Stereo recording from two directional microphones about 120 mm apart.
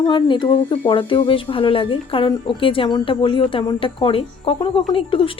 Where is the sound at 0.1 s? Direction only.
40° left (ahead or behind).